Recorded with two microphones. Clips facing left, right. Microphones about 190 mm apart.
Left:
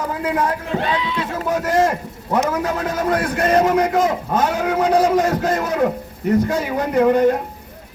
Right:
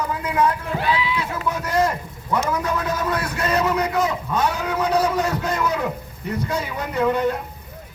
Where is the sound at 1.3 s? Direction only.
45° left (ahead or behind).